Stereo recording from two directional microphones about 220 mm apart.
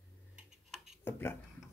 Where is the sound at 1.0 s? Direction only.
10° left (ahead or behind).